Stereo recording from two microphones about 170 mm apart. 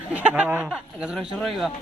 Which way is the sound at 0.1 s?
10° right (ahead or behind).